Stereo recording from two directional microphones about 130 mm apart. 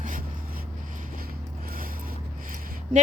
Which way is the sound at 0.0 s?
90° right.